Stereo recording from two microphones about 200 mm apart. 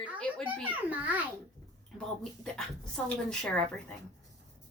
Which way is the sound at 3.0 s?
5° left (ahead or behind).